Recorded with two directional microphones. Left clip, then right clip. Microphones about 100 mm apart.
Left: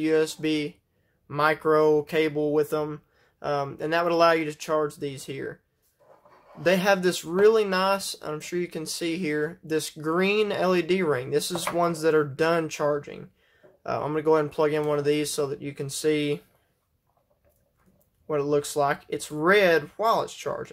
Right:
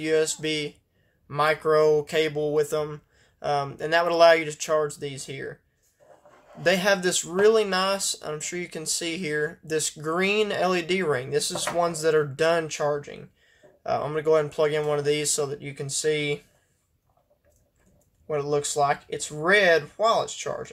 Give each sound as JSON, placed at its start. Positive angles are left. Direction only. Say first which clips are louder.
{"t": 0.0, "sound": "speech", "louder": "even", "side_deg": 40}
{"t": 6.6, "sound": "speech", "louder": "even", "side_deg": 35}
{"t": 12.6, "sound": "speech", "louder": "even", "side_deg": 55}
{"t": 13.8, "sound": "speech", "louder": "even", "side_deg": 45}
{"t": 18.2, "sound": "speech", "louder": "left 1 dB", "side_deg": 60}